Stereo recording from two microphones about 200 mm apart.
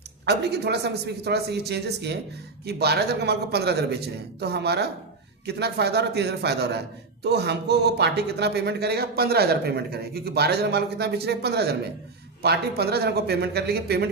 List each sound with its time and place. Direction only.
0.3 s a man's voice: 55° right (ahead or behind)